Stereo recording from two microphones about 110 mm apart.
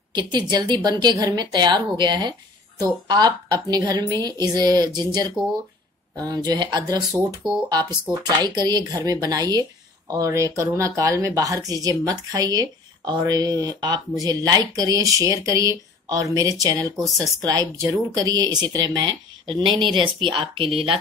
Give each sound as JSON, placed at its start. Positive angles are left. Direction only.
{"t": 0.1, "sound": "a woman's voice", "side_deg": -40}
{"t": 8.4, "sound": "a woman's voice", "side_deg": -40}